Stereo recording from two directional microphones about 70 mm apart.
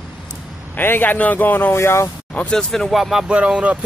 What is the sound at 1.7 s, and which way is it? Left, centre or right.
Speech, left.